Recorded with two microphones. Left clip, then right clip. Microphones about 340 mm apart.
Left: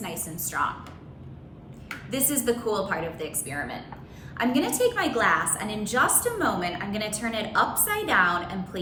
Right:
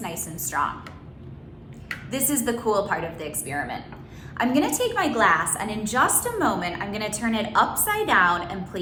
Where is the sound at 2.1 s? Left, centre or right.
Centre.